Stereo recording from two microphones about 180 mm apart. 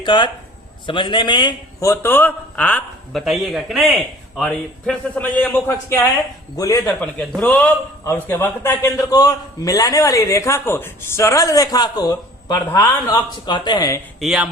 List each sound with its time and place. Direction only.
0.0 s a man's voice: 25° left (ahead or behind)
14.2 s speech: 5° right (ahead or behind)